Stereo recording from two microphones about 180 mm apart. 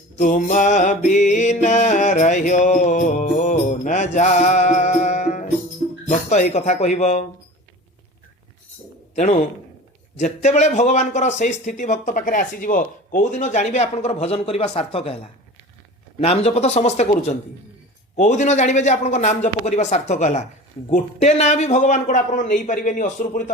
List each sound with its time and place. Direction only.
0.2 s music: 45° left (ahead or behind)
6.1 s speech: 40° left (ahead or behind)
9.1 s speech: 40° left (ahead or behind)